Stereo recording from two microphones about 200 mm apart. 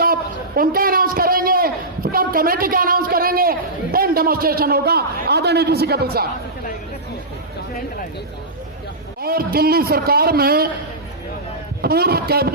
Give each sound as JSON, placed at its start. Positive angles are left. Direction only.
{"t": 0.0, "sound": "a sound", "side_deg": -45}
{"t": 2.1, "sound": "a man's voice", "side_deg": -45}
{"t": 9.2, "sound": "a man's voice", "side_deg": -50}
{"t": 11.8, "sound": "a man's voice", "side_deg": -50}